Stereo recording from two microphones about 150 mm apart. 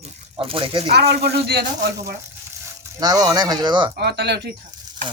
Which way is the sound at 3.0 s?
25° right (ahead or behind).